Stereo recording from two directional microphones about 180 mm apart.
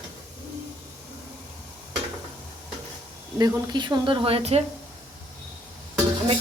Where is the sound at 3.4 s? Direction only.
25° right (ahead or behind).